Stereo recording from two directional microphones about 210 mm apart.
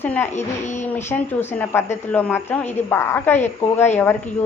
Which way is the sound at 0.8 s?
10° left (ahead or behind).